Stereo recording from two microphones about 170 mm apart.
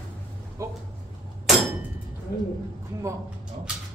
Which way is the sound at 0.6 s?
20° right (ahead or behind).